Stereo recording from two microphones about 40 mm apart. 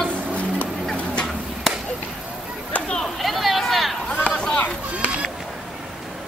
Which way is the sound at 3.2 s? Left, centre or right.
Centre.